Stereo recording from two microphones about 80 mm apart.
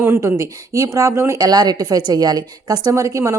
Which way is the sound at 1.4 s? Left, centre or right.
Right.